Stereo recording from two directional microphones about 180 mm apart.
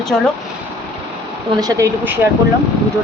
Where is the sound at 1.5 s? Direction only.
20° right (ahead or behind).